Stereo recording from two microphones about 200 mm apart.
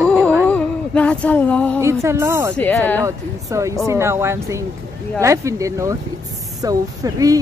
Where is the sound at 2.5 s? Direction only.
10° left (ahead or behind).